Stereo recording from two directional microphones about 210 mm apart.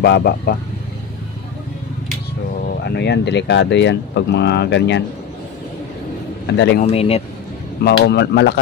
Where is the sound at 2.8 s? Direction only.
50° left (ahead or behind).